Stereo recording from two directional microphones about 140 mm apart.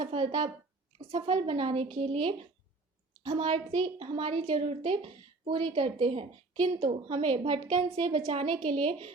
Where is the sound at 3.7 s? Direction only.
35° right (ahead or behind).